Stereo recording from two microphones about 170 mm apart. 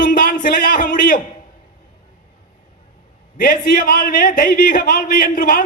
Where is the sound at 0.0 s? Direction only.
55° left (ahead or behind).